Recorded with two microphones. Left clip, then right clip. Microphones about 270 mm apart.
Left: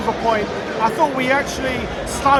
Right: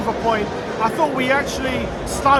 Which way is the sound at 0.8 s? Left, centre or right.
Centre.